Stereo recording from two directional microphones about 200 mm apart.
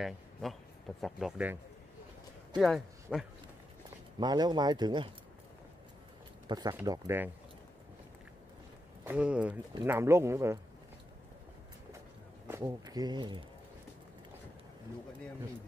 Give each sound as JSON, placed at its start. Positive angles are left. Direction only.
{"t": 0.0, "sound": "speech", "side_deg": 0}
{"t": 2.6, "sound": "a man's voice", "side_deg": 0}
{"t": 4.2, "sound": "speech", "side_deg": -20}
{"t": 6.4, "sound": "speech", "side_deg": -20}
{"t": 9.0, "sound": "speech", "side_deg": -5}
{"t": 12.4, "sound": "speech", "side_deg": -15}